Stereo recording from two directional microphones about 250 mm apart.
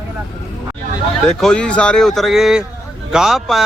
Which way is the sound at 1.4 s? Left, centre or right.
Centre.